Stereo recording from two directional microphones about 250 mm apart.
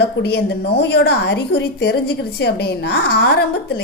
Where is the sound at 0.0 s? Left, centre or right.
Left.